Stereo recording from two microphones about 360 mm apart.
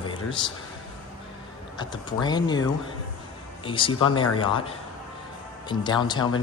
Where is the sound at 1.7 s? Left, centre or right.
Centre.